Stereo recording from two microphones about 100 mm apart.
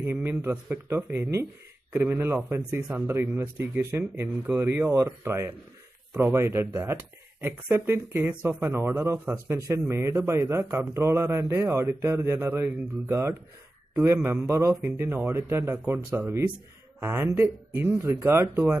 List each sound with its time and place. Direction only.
0.0 s speech: 20° right (ahead or behind)
14.5 s speech: 25° right (ahead or behind)